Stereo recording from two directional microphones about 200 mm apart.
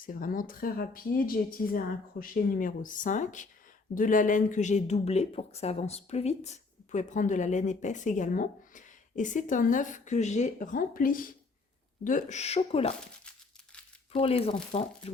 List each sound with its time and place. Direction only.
0.0 s speech: 45° left (ahead or behind)
14.1 s speech: 30° left (ahead or behind)